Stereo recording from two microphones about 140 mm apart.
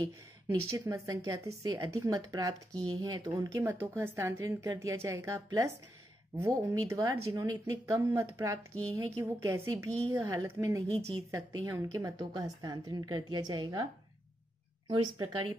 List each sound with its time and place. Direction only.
0.7 s speech: 20° right (ahead or behind)
14.9 s speech: 30° right (ahead or behind)